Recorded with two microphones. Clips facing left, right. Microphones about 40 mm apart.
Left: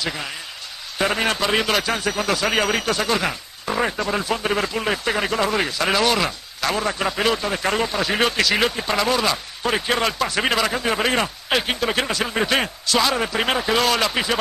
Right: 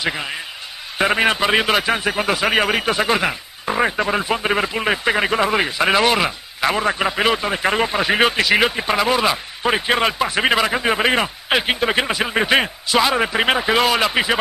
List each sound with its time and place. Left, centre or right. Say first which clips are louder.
0.9 s a man's voice: right 4 dB; right